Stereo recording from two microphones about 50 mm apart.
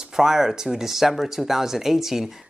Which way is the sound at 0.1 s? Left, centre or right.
Centre.